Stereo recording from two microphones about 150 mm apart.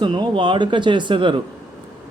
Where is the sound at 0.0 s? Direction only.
30° right (ahead or behind).